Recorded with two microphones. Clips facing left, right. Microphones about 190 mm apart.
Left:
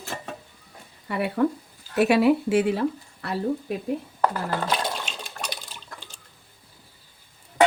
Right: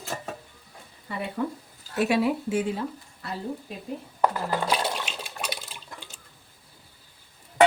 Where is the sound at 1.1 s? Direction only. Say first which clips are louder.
Left 7 dB; 65° left (ahead or behind).